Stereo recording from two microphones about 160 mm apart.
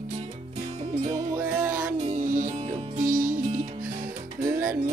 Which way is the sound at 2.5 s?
40° right (ahead or behind).